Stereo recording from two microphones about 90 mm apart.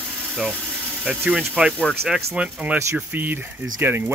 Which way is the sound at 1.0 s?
10° right (ahead or behind).